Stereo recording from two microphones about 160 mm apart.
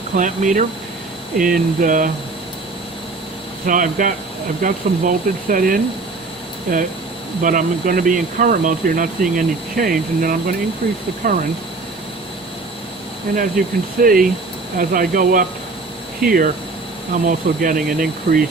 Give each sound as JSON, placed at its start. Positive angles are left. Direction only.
{"t": 0.2, "sound": "speech", "side_deg": -50}
{"t": 3.7, "sound": "speech", "side_deg": -55}
{"t": 7.4, "sound": "speech", "side_deg": -60}
{"t": 13.3, "sound": "speech", "side_deg": -60}